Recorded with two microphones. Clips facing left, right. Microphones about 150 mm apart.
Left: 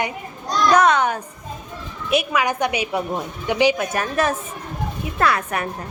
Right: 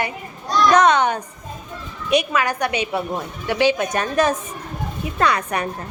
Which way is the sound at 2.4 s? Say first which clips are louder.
Left 1 dB; 15° left (ahead or behind).